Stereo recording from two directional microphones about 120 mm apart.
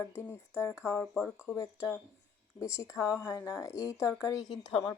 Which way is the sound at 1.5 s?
25° left (ahead or behind).